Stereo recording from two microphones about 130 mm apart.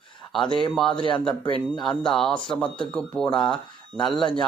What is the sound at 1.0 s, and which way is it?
Speech, 40° left (ahead or behind).